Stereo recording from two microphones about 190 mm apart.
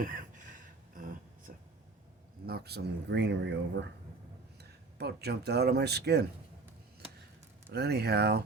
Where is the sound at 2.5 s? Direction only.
55° right (ahead or behind).